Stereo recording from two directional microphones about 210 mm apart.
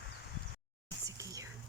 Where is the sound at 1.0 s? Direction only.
15° right (ahead or behind).